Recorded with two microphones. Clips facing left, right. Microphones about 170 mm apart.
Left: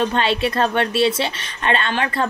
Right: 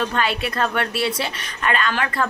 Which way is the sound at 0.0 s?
25° left (ahead or behind).